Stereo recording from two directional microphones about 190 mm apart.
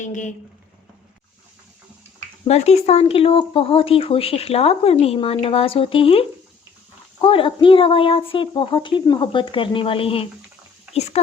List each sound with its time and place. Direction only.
0.0 s speech: 40° left (ahead or behind)
2.5 s speech: 35° left (ahead or behind)